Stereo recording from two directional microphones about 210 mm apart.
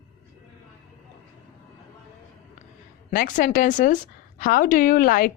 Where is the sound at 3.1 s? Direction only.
40° left (ahead or behind).